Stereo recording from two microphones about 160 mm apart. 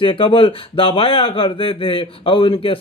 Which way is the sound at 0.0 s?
35° left (ahead or behind).